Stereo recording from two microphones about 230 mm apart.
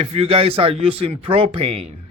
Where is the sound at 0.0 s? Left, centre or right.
Right.